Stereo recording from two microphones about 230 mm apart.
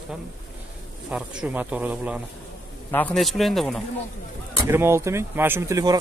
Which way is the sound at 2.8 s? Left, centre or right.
Centre.